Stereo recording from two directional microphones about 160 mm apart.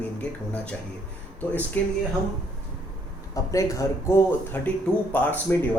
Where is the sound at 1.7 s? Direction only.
10° left (ahead or behind).